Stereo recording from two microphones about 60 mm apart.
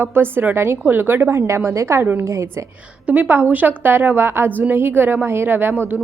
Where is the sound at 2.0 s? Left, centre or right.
Right.